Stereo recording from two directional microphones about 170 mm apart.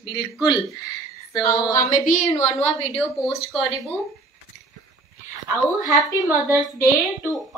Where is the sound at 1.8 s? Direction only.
50° left (ahead or behind).